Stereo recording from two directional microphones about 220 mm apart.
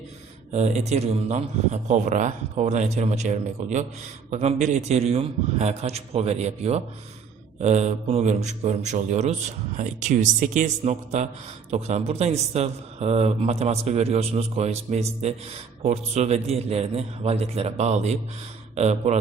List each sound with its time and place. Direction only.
0.5 s speech: 30° right (ahead or behind)